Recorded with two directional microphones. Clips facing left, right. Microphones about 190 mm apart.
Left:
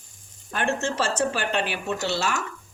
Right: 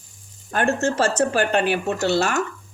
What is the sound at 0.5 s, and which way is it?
Speech, 45° right (ahead or behind).